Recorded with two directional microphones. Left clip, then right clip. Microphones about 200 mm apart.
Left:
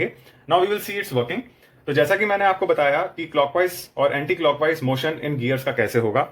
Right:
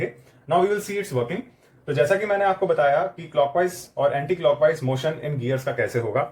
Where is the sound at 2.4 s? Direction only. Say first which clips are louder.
Even; 45° left (ahead or behind).